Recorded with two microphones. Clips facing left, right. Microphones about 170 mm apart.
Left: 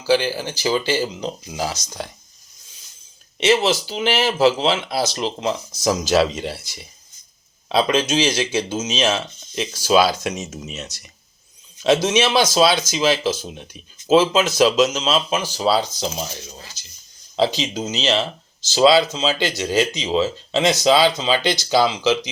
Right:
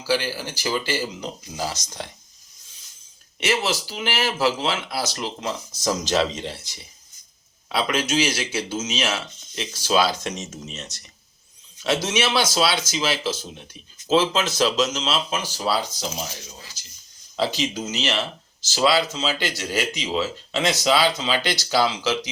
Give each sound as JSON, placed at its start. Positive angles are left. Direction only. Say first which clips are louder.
{"t": 0.1, "sound": "speech", "louder": "left 6 dB", "side_deg": 20}
{"t": 3.4, "sound": "speech", "louder": "left 6 dB", "side_deg": 25}
{"t": 7.7, "sound": "speech", "louder": "left 5 dB", "side_deg": 20}
{"t": 17.3, "sound": "speech", "louder": "left 4 dB", "side_deg": 20}